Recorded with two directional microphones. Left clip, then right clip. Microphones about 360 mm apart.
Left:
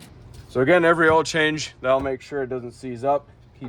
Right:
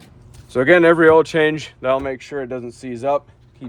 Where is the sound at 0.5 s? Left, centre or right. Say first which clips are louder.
Right 5 dB; right.